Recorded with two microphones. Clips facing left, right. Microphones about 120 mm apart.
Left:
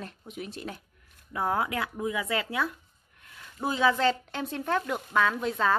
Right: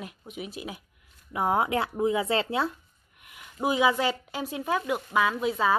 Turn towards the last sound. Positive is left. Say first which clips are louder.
# right 1 dB
turn(degrees=-5)  # may be behind; listen again after turning